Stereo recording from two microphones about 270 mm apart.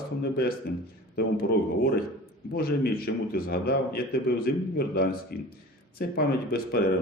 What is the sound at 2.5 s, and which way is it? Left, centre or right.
A man's voice, left.